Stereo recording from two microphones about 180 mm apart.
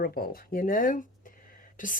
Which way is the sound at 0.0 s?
55° left (ahead or behind).